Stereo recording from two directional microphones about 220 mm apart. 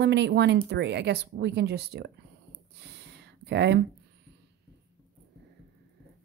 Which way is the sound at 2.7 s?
50° right (ahead or behind).